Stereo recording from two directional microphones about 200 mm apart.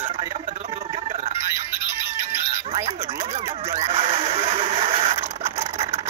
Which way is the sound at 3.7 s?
30° right (ahead or behind).